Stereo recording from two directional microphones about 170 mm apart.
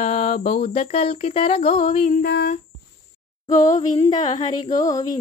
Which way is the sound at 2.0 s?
55° left (ahead or behind).